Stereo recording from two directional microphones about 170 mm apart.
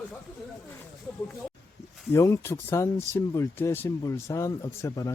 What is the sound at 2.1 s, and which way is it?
Speech, 15° left (ahead or behind).